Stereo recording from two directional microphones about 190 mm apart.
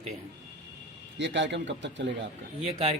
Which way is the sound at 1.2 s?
70° right (ahead or behind).